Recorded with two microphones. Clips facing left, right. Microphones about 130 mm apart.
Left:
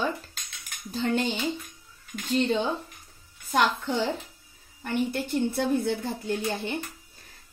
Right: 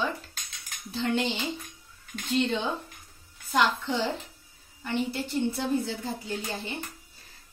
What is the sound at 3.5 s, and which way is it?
Speech, 45° left (ahead or behind).